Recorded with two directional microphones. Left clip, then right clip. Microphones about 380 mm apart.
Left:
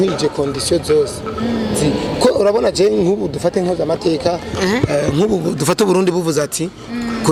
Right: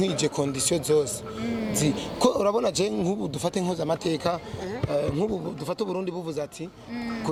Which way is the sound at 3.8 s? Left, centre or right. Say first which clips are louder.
Left 10 dB; right.